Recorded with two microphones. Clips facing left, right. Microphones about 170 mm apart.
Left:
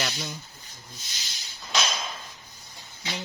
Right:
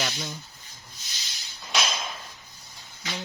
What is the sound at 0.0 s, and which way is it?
Rub, centre (ahead or behind).